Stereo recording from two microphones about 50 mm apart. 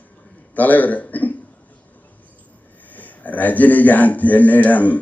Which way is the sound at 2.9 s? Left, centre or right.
Left.